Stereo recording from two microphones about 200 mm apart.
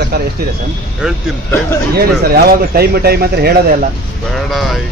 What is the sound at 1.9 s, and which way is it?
Speech, 50° right (ahead or behind).